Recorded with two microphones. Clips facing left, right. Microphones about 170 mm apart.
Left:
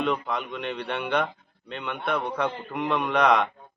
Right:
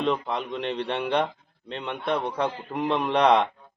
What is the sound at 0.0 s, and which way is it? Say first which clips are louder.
A man's voice: right 1 dB; 30° right (ahead or behind).